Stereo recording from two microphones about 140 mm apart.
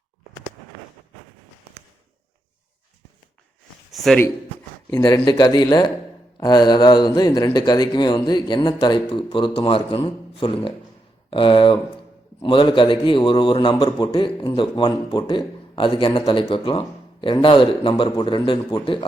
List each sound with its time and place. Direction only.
4.9 s a man's voice: 25° left (ahead or behind)